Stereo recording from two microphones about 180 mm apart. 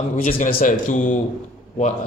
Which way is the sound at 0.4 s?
45° left (ahead or behind).